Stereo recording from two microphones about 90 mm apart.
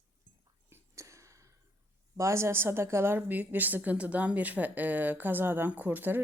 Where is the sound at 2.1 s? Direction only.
35° right (ahead or behind).